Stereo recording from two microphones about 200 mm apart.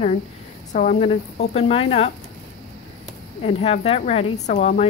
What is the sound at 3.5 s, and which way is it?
A woman's voice, 30° left (ahead or behind).